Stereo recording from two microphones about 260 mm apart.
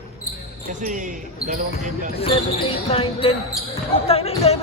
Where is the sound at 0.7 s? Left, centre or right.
Right.